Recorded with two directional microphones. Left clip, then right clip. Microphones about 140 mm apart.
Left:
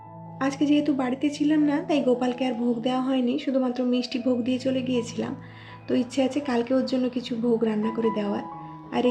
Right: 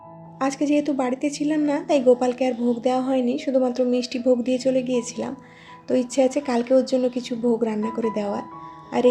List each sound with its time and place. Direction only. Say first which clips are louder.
0.3 s a woman's voice: right 2 dB; 35° right (ahead or behind)